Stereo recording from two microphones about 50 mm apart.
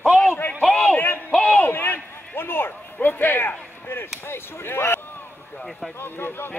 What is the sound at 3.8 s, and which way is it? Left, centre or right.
Chop, left.